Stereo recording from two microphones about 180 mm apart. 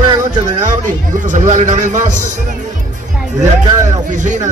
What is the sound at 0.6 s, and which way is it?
A man's voice, 45° right (ahead or behind).